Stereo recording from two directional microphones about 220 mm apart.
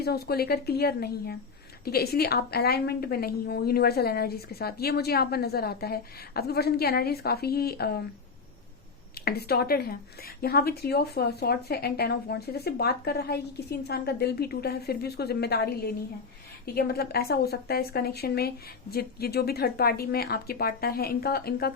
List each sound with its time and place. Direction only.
0.0 s a woman's voice: 45° left (ahead or behind)
9.1 s a woman's voice: 45° left (ahead or behind)